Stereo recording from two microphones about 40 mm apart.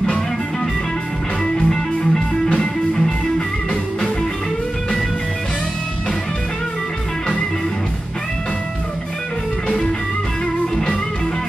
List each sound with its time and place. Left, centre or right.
1.4 s music: centre